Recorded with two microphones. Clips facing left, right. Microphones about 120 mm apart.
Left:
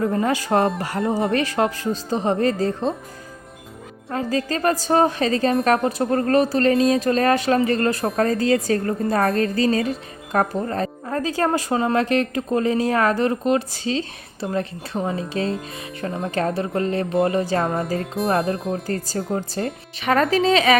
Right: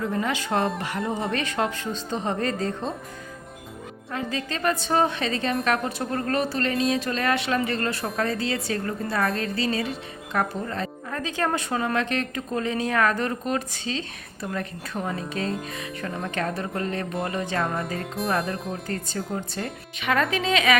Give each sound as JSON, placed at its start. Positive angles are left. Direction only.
{"t": 0.2, "sound": "speech", "side_deg": 40}
{"t": 4.1, "sound": "speech", "side_deg": 40}
{"t": 18.0, "sound": "music", "side_deg": 0}
{"t": 18.3, "sound": "speech", "side_deg": 35}
{"t": 18.5, "sound": "music", "side_deg": 0}
{"t": 18.9, "sound": "speech", "side_deg": 35}